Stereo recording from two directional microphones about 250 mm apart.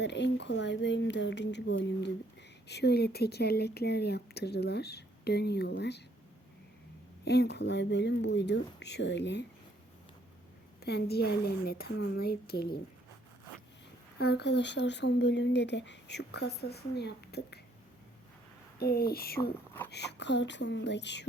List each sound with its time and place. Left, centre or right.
0.0 s speech: left
7.3 s speech: left
10.8 s speech: left
14.2 s speech: left
18.8 s speech: left